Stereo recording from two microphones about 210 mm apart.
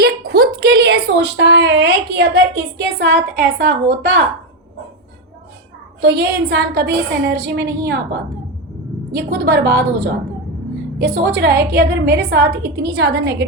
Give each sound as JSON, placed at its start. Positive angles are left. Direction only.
{"t": 0.0, "sound": "a woman's voice", "side_deg": -45}
{"t": 6.0, "sound": "a woman's voice", "side_deg": -50}